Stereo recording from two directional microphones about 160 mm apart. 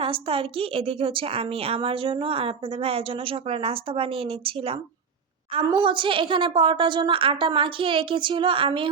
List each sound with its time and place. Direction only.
0.0 s a woman's voice: 35° right (ahead or behind)